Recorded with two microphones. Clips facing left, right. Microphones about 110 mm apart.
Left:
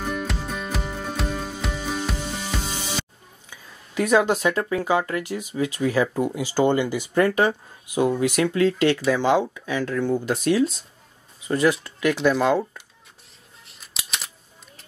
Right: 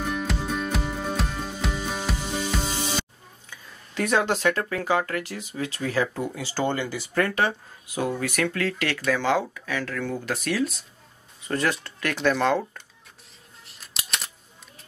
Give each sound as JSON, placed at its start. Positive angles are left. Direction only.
{"t": 0.0, "sound": "music", "side_deg": 0}
{"t": 3.4, "sound": "speech", "side_deg": 15}
{"t": 13.7, "sound": "scissors", "side_deg": 0}